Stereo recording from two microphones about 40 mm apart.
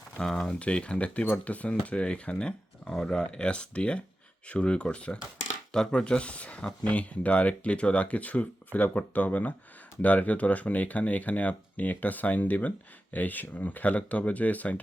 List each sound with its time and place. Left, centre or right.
0.2 s speech: left
1.2 s speech: left
5.7 s speech: centre; by 14.8 s left